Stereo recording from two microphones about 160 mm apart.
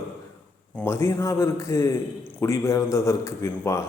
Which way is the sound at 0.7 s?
10° left (ahead or behind).